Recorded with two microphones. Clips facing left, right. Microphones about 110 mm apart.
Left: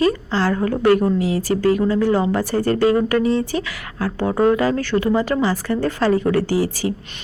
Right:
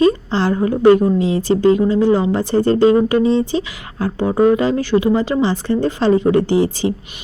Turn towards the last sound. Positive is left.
turn(degrees=-25)  # may be behind; listen again after turning